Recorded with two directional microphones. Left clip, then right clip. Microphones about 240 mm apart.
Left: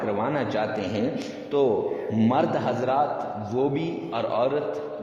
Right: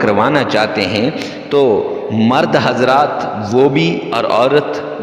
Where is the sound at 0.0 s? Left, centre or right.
Right.